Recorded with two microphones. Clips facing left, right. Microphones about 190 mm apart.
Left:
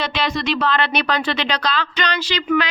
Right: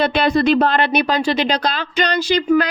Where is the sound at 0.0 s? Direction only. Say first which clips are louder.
Right 7 dB; 55° right (ahead or behind).